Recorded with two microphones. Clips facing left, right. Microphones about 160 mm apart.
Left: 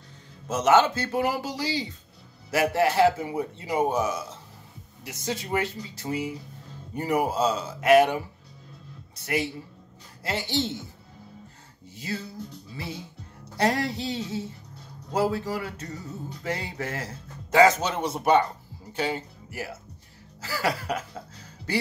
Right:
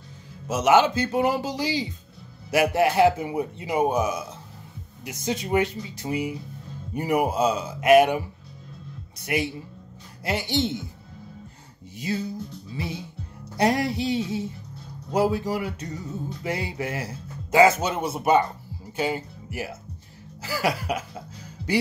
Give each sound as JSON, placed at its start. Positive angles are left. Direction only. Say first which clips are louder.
{"t": 0.5, "sound": "a man's voice", "louder": "right 1 dB", "side_deg": -10}
{"t": 9.2, "sound": "a man's voice", "louder": "right 2 dB", "side_deg": -15}
{"t": 12.0, "sound": "a man's voice", "louder": "right 5 dB", "side_deg": -15}